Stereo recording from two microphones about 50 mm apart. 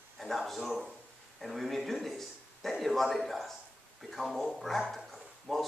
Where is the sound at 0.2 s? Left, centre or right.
Centre.